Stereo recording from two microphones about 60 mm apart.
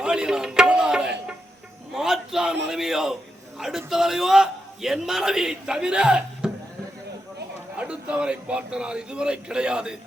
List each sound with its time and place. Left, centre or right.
0.0 s tabla: centre
1.9 s a man's voice: centre
7.8 s a man's voice: centre